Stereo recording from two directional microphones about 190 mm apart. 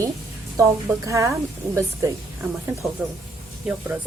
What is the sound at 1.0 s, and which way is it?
Speech, 15° right (ahead or behind).